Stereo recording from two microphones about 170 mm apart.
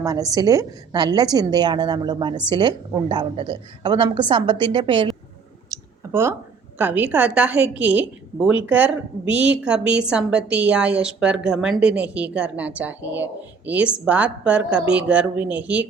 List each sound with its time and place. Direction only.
0.0 s a woman's voice: 20° right (ahead or behind)
5.7 s a sound: 15° right (ahead or behind)
6.7 s a woman's voice: 10° right (ahead or behind)